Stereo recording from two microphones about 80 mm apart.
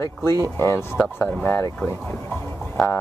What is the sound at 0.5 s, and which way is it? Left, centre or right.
Speech, left.